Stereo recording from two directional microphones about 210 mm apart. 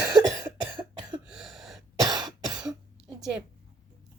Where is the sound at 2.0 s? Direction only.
20° right (ahead or behind).